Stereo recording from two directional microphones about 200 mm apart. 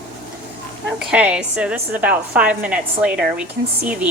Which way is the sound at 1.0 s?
5° right (ahead or behind).